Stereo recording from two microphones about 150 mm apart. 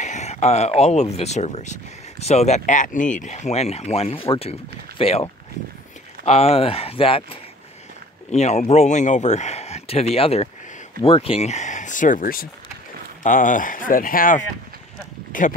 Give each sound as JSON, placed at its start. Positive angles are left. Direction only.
{"t": 0.0, "sound": "speech", "side_deg": 50}
{"t": 8.3, "sound": "speech", "side_deg": 50}